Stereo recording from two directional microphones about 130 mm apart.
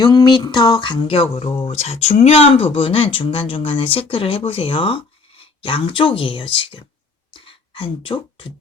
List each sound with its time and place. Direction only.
0.0 s speech: 35° left (ahead or behind)